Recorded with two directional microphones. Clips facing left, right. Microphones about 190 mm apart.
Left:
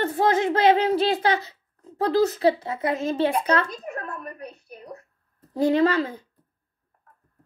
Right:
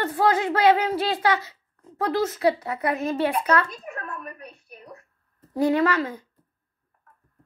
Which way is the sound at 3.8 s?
35° left (ahead or behind).